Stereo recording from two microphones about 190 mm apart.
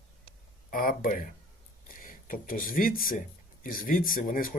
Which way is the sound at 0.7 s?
50° left (ahead or behind).